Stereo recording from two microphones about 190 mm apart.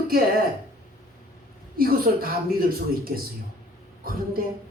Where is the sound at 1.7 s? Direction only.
50° right (ahead or behind).